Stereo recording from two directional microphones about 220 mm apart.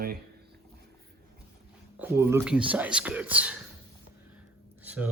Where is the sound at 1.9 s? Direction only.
10° right (ahead or behind).